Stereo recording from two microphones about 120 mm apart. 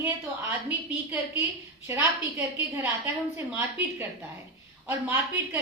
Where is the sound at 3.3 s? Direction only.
20° right (ahead or behind).